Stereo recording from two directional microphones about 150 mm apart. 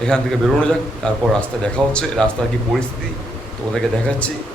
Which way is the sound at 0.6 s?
5° left (ahead or behind).